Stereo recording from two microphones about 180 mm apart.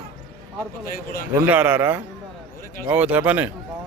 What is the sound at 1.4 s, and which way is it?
Speech, 10° right (ahead or behind).